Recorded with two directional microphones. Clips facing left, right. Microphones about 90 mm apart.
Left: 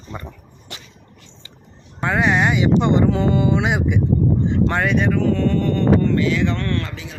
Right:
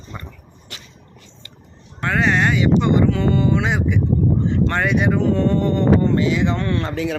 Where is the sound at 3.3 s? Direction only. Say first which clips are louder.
Even; 15° left (ahead or behind).